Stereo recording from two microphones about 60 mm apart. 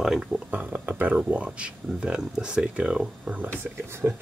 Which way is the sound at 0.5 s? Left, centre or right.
Right.